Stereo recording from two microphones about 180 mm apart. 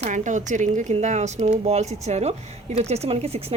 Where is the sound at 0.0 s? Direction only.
40° right (ahead or behind).